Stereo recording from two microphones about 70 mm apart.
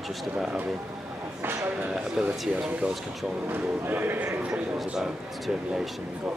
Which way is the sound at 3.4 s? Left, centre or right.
Right.